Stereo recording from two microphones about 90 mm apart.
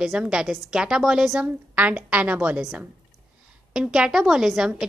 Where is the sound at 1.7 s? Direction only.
15° right (ahead or behind).